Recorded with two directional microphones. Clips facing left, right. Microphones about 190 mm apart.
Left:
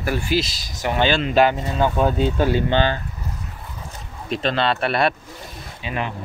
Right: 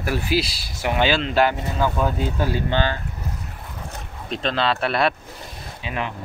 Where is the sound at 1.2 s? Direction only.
20° left (ahead or behind).